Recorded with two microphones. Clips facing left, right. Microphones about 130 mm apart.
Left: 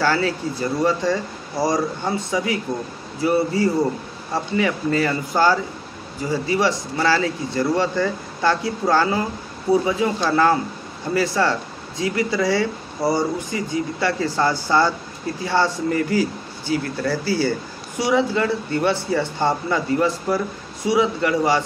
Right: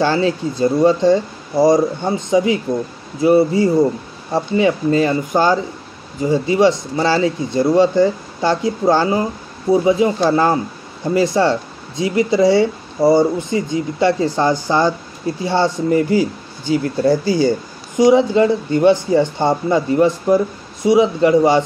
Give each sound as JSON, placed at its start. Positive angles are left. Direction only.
{"t": 0.0, "sound": "speech", "side_deg": -20}